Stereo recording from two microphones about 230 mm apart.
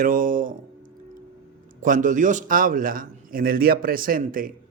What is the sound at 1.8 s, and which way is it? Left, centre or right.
A man's voice, right.